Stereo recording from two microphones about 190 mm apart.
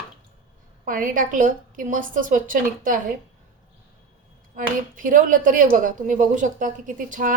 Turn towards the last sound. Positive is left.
turn(degrees=-45)  # may be behind; listen again after turning